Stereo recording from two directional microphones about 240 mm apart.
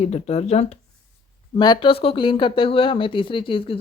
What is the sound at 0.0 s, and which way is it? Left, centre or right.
Speech, left.